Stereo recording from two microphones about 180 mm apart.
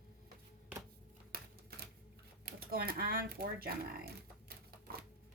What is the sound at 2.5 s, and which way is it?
Speech, 55° right (ahead or behind).